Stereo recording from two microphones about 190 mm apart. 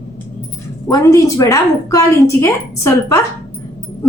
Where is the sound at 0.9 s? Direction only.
15° left (ahead or behind).